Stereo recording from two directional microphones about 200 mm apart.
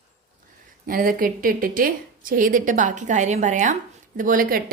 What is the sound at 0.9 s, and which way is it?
A woman's voice, 45° right (ahead or behind).